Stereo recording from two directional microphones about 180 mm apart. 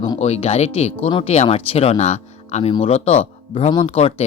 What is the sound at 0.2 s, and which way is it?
Speech, 35° left (ahead or behind).